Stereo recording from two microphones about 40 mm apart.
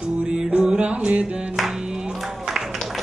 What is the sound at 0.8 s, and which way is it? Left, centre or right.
Music, right.